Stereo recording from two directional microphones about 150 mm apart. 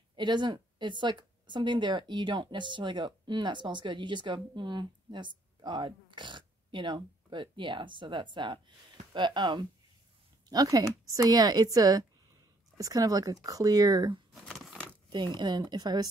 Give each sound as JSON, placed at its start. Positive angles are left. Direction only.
{"t": 0.1, "sound": "speech", "side_deg": -30}
{"t": 14.3, "sound": "a sound", "side_deg": 0}
{"t": 15.0, "sound": "speech", "side_deg": -30}